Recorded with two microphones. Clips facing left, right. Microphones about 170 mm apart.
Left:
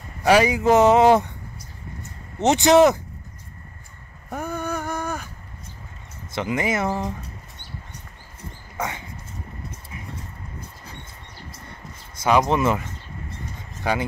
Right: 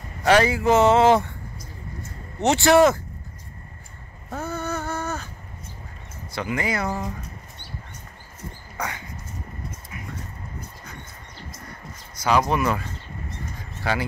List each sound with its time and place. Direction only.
0.2 s speech: 10° left (ahead or behind)
2.4 s speech: 20° left (ahead or behind)
4.3 s a sound: 15° left (ahead or behind)
6.3 s speech: 20° left (ahead or behind)
8.7 s dog: 25° left (ahead or behind)
12.2 s speech: 20° left (ahead or behind)